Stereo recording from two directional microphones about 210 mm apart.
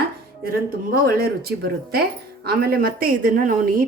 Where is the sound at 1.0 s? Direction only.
45° right (ahead or behind).